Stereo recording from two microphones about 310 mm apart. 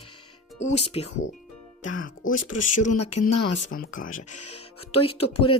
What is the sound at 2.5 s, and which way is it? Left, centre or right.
Speech, left.